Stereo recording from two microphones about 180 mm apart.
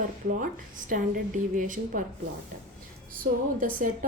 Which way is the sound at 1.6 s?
50° right (ahead or behind).